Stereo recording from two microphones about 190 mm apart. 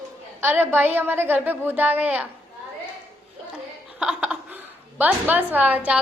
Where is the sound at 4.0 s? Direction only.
5° right (ahead or behind).